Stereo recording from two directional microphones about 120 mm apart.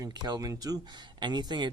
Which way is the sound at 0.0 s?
35° right (ahead or behind).